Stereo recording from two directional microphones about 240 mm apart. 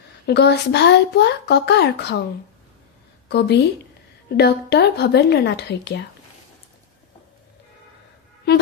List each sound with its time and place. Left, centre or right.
0.3 s speech: left
3.3 s speech: left